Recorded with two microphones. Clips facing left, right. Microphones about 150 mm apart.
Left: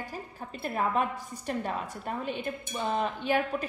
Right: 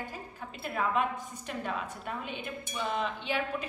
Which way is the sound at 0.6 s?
35° left (ahead or behind).